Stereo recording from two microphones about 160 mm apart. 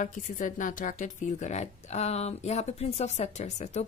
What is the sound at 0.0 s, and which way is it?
A woman's voice, 55° left (ahead or behind).